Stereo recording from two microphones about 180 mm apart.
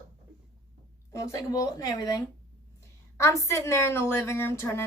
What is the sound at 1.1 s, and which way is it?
A woman's voice, 15° left (ahead or behind).